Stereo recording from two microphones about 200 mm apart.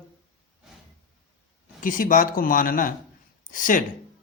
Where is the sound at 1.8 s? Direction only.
40° left (ahead or behind).